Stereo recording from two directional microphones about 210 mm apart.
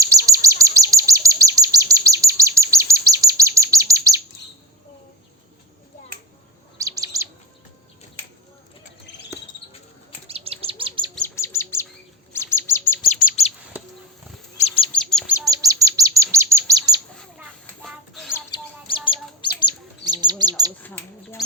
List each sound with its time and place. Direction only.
0.0 s chirp: 15° right (ahead or behind)
6.7 s chirp: 15° right (ahead or behind)
10.2 s bird: 30° right (ahead or behind)
11.1 s chirp: 10° left (ahead or behind)
13.4 s bird: 30° left (ahead or behind)
14.9 s bird: 5° left (ahead or behind)
15.3 s chirp: 15° right (ahead or behind)
17.2 s rodents: centre (ahead or behind)
18.3 s chirp: 20° left (ahead or behind)
20.2 s bird: 20° right (ahead or behind)
20.8 s a sound: 10° left (ahead or behind)